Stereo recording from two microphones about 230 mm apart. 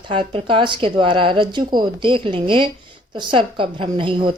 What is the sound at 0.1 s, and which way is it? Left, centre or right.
A woman's voice, right.